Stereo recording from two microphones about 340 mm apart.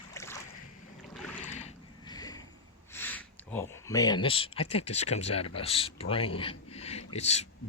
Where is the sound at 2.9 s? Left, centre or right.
Centre.